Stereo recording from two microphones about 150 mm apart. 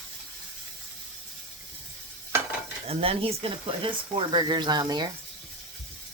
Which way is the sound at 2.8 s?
40° right (ahead or behind).